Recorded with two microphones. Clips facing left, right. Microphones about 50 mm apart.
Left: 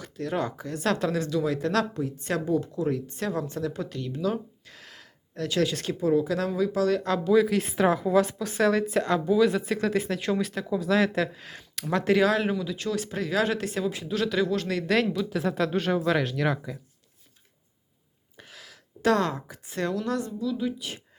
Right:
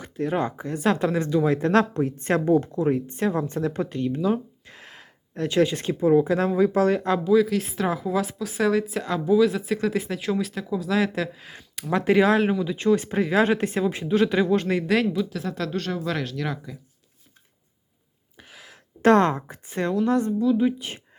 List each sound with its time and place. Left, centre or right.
0.0 s speech: right
1.9 s a woman's voice: right
2.8 s a woman's voice: right
4.2 s gasp: right
6.0 s speech: right
7.3 s speech: centre
12.7 s speech: right
14.8 s speech: centre
15.3 s speech: centre
18.3 s a sound: centre
19.0 s a woman's voice: right